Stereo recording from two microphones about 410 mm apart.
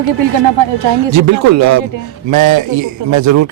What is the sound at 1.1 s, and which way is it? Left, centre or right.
Speech, right.